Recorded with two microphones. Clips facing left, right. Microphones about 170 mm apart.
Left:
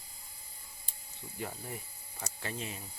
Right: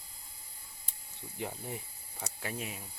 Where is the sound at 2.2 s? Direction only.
10° right (ahead or behind).